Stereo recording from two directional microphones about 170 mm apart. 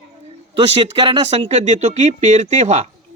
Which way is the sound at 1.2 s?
40° right (ahead or behind).